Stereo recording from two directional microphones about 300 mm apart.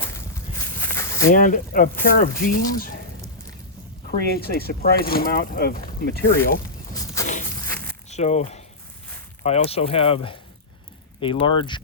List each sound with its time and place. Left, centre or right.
0.8 s walk: centre
1.3 s speech: left
4.4 s speech: left
6.9 s walk: centre
7.6 s a sound: centre
8.1 s speech: left